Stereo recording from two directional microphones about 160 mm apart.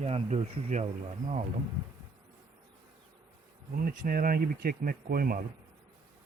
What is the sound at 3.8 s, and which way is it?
Speech, 60° right (ahead or behind).